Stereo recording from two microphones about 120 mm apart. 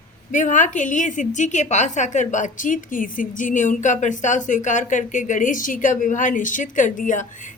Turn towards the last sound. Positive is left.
turn(degrees=90)